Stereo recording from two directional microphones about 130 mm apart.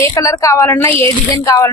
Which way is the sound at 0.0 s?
25° left (ahead or behind).